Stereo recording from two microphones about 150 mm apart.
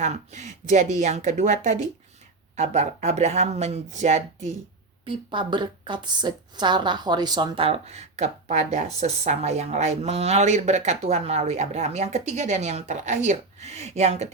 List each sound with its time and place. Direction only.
0.0 s a woman's voice: 50° right (ahead or behind)
5.0 s a woman's voice: 30° right (ahead or behind)